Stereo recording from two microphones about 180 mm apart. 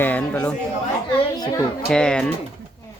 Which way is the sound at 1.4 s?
20° left (ahead or behind).